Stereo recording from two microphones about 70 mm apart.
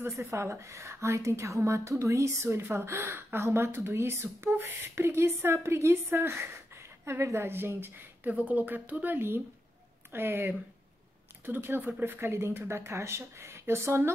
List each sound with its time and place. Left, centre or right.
0.0 s a woman's voice: right